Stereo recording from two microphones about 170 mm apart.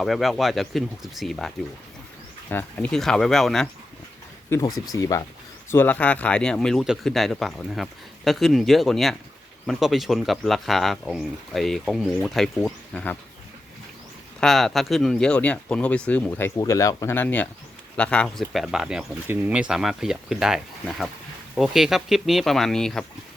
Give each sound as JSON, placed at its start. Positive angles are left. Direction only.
{"t": 0.0, "sound": "speech", "side_deg": 0}
{"t": 4.5, "sound": "speech", "side_deg": 15}
{"t": 14.4, "sound": "speech", "side_deg": 0}